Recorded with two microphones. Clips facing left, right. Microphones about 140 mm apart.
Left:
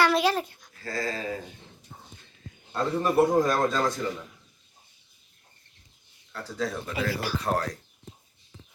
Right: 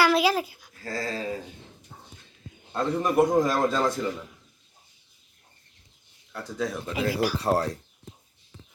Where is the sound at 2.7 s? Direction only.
15° right (ahead or behind).